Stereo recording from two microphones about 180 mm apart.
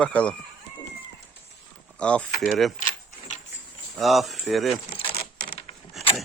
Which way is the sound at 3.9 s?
Centre (ahead or behind).